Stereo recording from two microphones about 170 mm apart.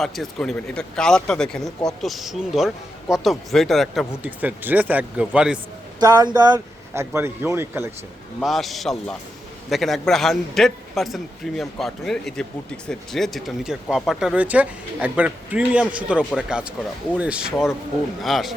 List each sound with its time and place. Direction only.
0.0 s a man's voice: centre (ahead or behind)
6.0 s a man's voice: 20° right (ahead or behind)
8.4 s a man's voice: centre (ahead or behind)